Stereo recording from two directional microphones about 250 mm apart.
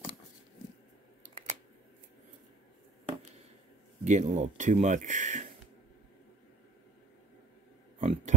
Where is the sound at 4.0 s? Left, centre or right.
Right.